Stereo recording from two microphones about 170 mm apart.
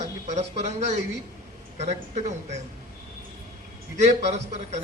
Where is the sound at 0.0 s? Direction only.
45° right (ahead or behind).